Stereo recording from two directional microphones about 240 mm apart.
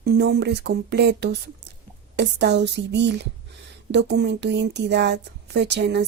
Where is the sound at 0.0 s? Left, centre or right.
Right.